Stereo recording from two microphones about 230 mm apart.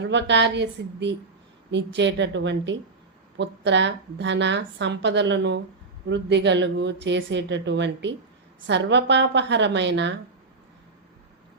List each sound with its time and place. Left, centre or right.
0.0 s a woman's voice: right